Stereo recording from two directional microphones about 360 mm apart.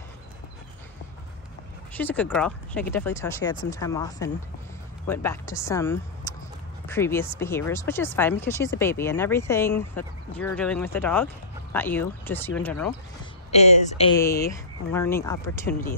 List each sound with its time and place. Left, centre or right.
2.0 s speech: centre
13.5 s speech: centre